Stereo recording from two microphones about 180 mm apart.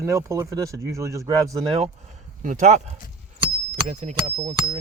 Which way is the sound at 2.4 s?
45° right (ahead or behind).